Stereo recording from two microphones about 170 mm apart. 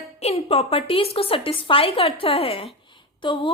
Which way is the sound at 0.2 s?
35° left (ahead or behind).